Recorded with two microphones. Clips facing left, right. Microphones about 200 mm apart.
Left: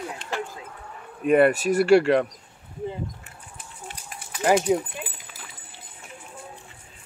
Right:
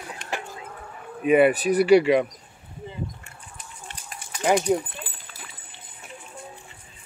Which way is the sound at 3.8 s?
5° left (ahead or behind).